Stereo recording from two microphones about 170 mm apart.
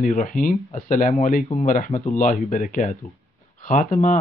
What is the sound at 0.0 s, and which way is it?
Speech, 55° left (ahead or behind).